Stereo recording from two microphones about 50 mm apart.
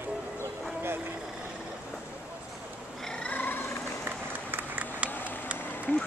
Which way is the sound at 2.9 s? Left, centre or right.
Centre.